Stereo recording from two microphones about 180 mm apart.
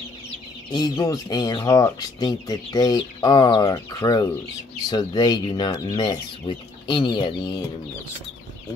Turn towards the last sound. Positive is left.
turn(degrees=20)  # may be behind; listen again after turning